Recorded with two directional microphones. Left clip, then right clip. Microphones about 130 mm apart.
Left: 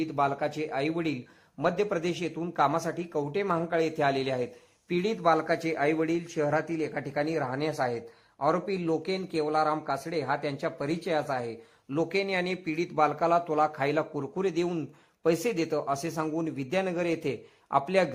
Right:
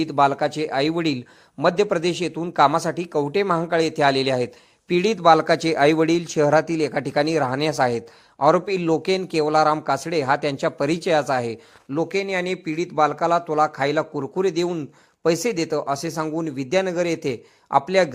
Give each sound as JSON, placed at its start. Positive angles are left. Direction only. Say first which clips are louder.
{"t": 0.0, "sound": "speech", "louder": "right 9 dB", "side_deg": -35}